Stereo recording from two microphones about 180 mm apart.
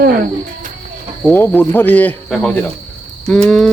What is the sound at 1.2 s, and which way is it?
Speech, 10° left (ahead or behind).